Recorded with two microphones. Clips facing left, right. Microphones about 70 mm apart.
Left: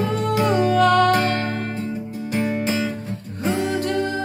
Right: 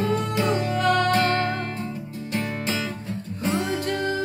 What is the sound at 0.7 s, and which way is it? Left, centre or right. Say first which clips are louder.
Music: left 6 dB; left.